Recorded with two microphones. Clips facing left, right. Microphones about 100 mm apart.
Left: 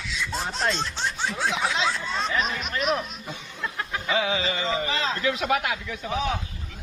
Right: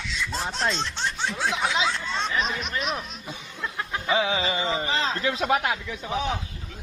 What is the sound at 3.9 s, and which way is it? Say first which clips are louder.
A man's voice: right 1 dB; 25° right (ahead or behind).